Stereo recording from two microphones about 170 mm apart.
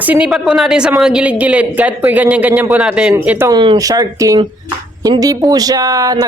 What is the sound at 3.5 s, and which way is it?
Speech, 25° right (ahead or behind).